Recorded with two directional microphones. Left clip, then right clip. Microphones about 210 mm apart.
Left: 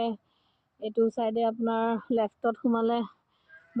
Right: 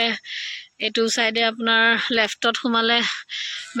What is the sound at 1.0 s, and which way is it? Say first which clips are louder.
Speech: right 6 dB; 35° right (ahead or behind).